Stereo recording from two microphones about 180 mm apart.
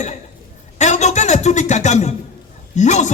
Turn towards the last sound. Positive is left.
turn(degrees=40)  # may be behind; listen again after turning